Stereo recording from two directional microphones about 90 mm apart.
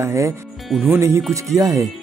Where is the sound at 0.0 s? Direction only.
35° right (ahead or behind).